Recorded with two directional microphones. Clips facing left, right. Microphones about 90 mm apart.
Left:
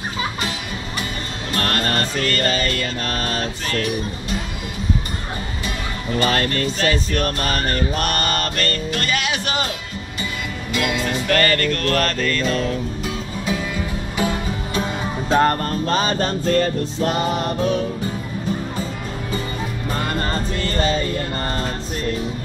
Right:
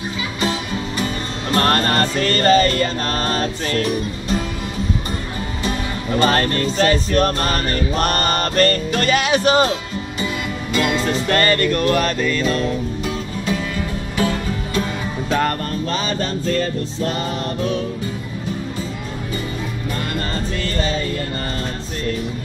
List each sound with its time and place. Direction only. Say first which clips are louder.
1.5 s music: right 5 dB; 35° right (ahead or behind)
6.1 s music: right 3 dB; 35° right (ahead or behind); by 13.6 s centre (ahead or behind)
14.1 s music: right 2 dB; 15° left (ahead or behind)
15.2 s music: left 3 dB; 30° left (ahead or behind)
15.9 s music: left 4 dB; 45° left (ahead or behind)